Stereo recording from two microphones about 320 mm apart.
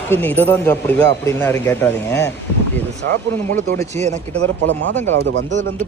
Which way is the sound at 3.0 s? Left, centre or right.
Right.